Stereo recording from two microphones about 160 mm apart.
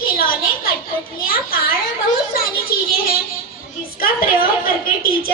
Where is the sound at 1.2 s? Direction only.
65° left (ahead or behind).